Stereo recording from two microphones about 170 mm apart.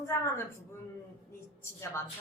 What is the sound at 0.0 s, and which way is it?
Speech, 15° left (ahead or behind).